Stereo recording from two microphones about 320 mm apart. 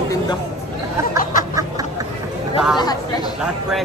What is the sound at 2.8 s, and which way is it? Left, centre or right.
Speech, centre.